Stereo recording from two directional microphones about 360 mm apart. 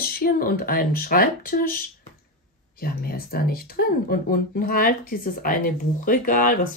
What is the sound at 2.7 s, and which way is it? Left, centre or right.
Speech, left.